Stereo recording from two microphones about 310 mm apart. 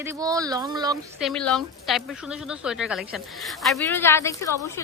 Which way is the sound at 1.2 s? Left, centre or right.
Centre.